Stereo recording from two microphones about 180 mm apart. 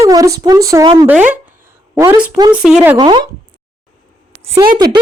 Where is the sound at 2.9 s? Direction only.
25° right (ahead or behind).